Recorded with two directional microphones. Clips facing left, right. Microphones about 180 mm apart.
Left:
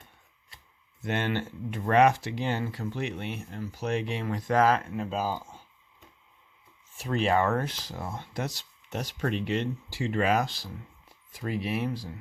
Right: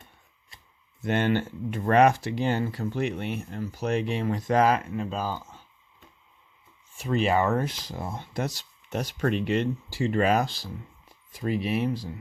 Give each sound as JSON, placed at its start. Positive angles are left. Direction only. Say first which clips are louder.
{"t": 1.0, "sound": "speech", "louder": "right 5 dB", "side_deg": -40}
{"t": 4.4, "sound": "speech", "louder": "right 1 dB", "side_deg": -20}
{"t": 4.9, "sound": "speech", "louder": "even", "side_deg": 5}
{"t": 6.9, "sound": "speech", "louder": "right 2 dB", "side_deg": 0}
{"t": 8.4, "sound": "speech", "louder": "right 4 dB", "side_deg": -45}
{"t": 11.3, "sound": "speech", "louder": "right 4 dB", "side_deg": -20}